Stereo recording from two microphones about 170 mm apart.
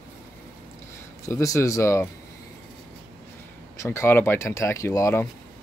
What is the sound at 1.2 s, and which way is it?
Speech, 20° left (ahead or behind).